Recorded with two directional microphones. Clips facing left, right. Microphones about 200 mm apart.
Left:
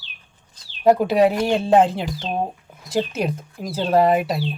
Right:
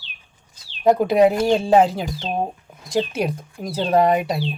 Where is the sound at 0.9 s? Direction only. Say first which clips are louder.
Right 1 dB; centre (ahead or behind).